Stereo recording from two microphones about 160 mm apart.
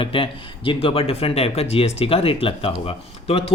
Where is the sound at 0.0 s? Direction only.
35° left (ahead or behind).